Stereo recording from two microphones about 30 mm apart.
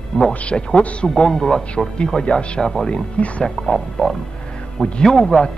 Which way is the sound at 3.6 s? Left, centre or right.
Centre.